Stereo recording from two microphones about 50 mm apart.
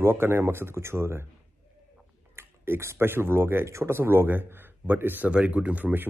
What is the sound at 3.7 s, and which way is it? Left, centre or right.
Speech, right.